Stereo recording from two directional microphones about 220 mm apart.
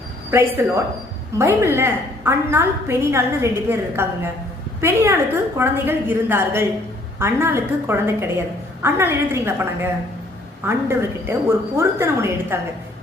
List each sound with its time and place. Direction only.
0.3 s a woman's voice: 10° right (ahead or behind)